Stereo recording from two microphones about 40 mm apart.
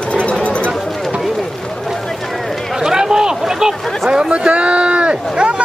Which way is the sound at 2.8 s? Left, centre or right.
Centre.